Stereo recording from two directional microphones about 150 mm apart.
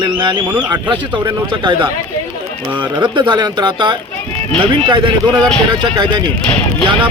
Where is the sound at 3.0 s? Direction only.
30° right (ahead or behind).